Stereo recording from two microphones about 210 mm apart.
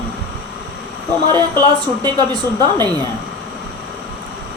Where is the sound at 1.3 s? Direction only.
20° right (ahead or behind).